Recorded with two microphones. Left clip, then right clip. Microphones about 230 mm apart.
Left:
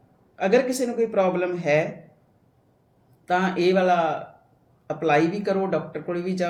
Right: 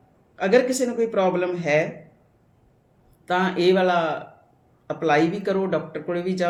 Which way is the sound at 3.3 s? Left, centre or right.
Centre.